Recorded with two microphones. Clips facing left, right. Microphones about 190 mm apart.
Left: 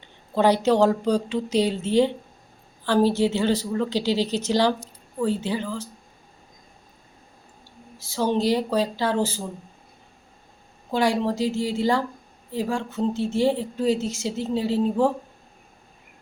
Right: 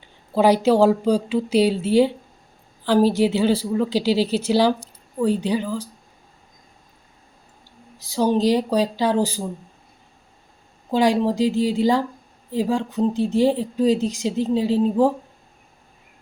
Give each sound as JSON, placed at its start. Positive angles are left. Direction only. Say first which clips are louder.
{"t": 0.0, "sound": "speech", "louder": "right 3 dB", "side_deg": -10}
{"t": 8.1, "sound": "speech", "louder": "right 4 dB", "side_deg": -15}
{"t": 10.9, "sound": "speech", "louder": "right 4 dB", "side_deg": -15}